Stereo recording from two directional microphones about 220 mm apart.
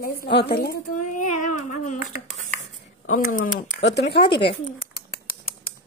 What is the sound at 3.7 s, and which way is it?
Speech, 55° left (ahead or behind).